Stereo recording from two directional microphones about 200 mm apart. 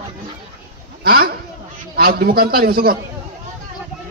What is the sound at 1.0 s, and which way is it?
A man's voice, 50° right (ahead or behind).